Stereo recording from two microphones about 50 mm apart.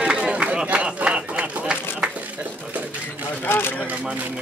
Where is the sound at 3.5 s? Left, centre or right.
Left.